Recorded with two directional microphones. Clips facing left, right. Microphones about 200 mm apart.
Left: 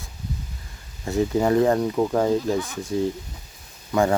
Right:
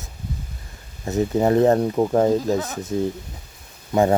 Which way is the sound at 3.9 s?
25° right (ahead or behind).